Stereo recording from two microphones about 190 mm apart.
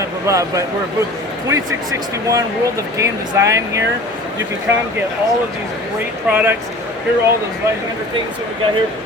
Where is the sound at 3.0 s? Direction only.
15° right (ahead or behind).